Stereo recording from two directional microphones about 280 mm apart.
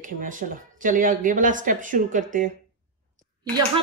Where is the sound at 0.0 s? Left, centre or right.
Right.